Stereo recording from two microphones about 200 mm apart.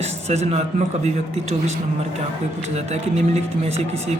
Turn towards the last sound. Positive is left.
turn(degrees=-30)  # may be behind; listen again after turning